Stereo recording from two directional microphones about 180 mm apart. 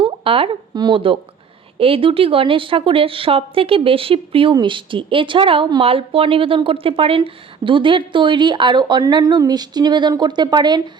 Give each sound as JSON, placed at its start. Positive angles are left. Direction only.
{"t": 0.0, "sound": "a woman's voice", "side_deg": -30}